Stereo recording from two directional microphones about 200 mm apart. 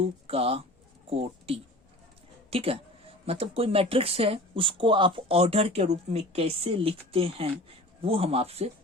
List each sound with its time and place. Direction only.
0.3 s speech: 30° right (ahead or behind)